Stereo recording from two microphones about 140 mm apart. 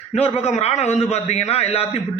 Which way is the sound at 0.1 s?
45° left (ahead or behind).